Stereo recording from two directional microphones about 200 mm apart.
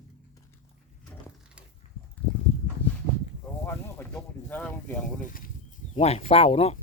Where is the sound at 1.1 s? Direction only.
5° left (ahead or behind).